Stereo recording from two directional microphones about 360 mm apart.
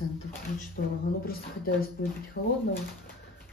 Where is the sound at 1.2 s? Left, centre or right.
Left.